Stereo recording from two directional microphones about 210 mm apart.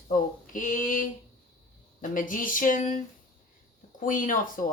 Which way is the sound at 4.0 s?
40° left (ahead or behind).